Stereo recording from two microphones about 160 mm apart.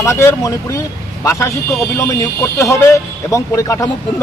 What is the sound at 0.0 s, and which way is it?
A man's voice, 15° left (ahead or behind).